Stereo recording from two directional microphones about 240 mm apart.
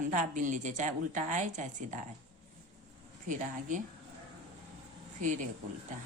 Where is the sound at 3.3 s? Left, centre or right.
Right.